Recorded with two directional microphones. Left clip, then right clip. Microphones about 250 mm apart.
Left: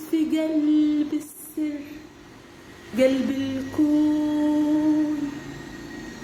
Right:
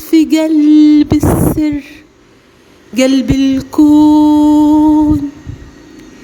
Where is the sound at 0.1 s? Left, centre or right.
Right.